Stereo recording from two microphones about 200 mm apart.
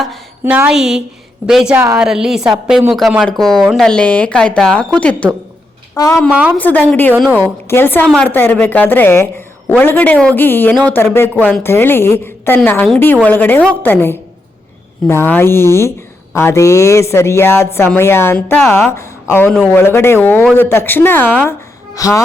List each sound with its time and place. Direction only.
0.0 s a woman's voice: 5° right (ahead or behind)
6.0 s a woman's voice: 15° left (ahead or behind)
6.3 s a woman's voice: 5° right (ahead or behind)
6.6 s a woman's voice: 10° left (ahead or behind)
7.1 s a woman's voice: 10° right (ahead or behind)
7.7 s a woman's voice: 10° left (ahead or behind)